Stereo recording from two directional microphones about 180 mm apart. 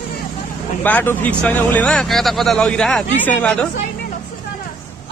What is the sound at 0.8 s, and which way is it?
Speech, 10° left (ahead or behind).